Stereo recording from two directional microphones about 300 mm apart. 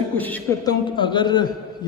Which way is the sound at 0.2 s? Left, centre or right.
Centre.